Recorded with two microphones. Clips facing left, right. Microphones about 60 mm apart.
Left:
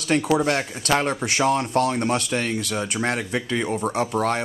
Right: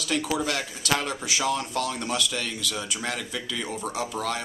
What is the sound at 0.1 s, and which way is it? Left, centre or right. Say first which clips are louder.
Speech: left 7 dB; left.